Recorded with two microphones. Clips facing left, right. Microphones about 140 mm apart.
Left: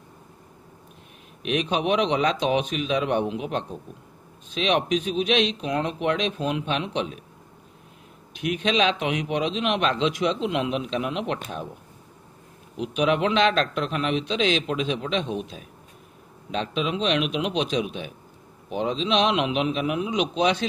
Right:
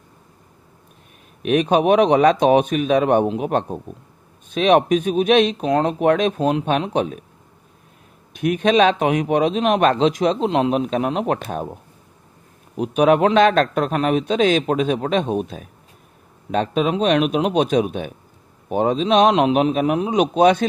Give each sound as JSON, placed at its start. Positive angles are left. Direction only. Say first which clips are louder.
{"t": 1.4, "sound": "a man's voice", "louder": "right 8 dB", "side_deg": -50}
{"t": 8.4, "sound": "a man's voice", "louder": "right 7 dB", "side_deg": -50}
{"t": 12.7, "sound": "a man's voice", "louder": "right 7 dB", "side_deg": -45}